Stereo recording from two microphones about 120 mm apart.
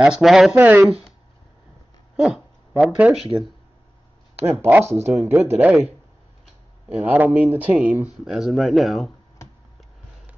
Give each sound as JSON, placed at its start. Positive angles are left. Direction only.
{"t": 0.0, "sound": "speech", "side_deg": -5}
{"t": 0.6, "sound": "speech", "side_deg": -15}
{"t": 2.1, "sound": "speech", "side_deg": -5}
{"t": 4.6, "sound": "speech", "side_deg": -20}
{"t": 7.0, "sound": "speech", "side_deg": -15}